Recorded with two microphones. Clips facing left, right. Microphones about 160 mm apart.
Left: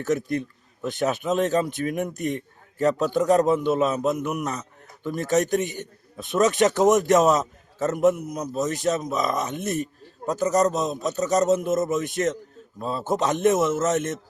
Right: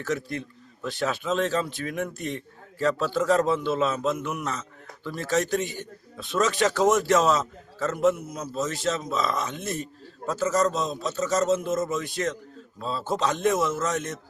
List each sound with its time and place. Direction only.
0.0 s a man's voice: 20° left (ahead or behind)